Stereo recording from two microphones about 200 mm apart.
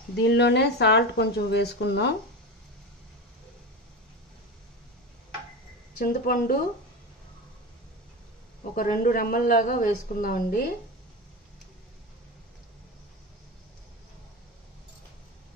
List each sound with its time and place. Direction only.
0.2 s speech: 55° left (ahead or behind)
5.9 s speech: 45° left (ahead or behind)
8.7 s speech: 45° left (ahead or behind)